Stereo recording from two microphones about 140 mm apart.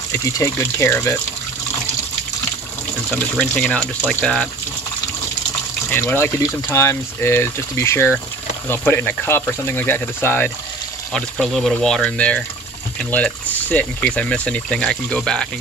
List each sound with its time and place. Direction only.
0.1 s speech: 20° left (ahead or behind)
3.1 s speech: 5° left (ahead or behind)
5.9 s speech: 15° left (ahead or behind)
11.1 s speech: 5° left (ahead or behind)